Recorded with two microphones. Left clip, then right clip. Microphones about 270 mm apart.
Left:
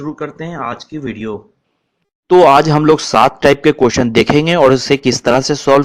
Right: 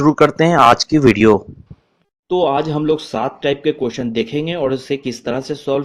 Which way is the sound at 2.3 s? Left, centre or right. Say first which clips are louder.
Left 9 dB; left.